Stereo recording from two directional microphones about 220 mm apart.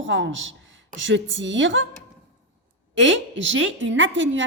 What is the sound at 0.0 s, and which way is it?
A woman's voice, 55° right (ahead or behind).